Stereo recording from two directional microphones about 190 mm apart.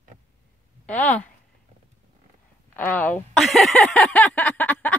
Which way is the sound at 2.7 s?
10° left (ahead or behind).